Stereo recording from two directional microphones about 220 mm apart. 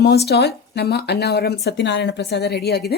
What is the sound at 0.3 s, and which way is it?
A woman's voice, 45° left (ahead or behind).